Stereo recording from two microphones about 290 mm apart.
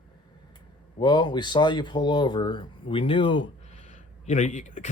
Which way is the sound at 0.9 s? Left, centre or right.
Centre.